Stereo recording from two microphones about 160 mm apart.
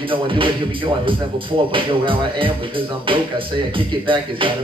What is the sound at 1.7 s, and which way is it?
Speech, 35° right (ahead or behind).